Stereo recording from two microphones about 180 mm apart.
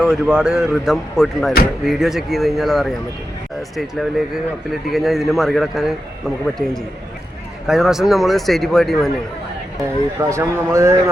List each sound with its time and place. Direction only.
0.0 s speech: 5° right (ahead or behind)
6.6 s a man's voice: 50° right (ahead or behind)
7.7 s speech: centre (ahead or behind)
10.2 s a man's voice: 15° right (ahead or behind)